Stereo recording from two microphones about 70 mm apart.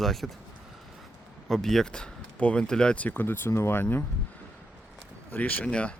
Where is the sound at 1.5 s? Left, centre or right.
Centre.